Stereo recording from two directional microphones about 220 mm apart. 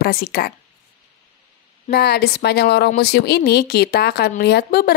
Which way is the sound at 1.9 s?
45° left (ahead or behind).